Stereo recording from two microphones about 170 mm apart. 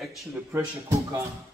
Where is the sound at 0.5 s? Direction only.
15° right (ahead or behind).